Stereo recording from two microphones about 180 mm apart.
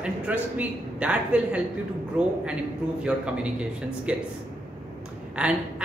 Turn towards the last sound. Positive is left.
turn(degrees=-5)  # may be behind; listen again after turning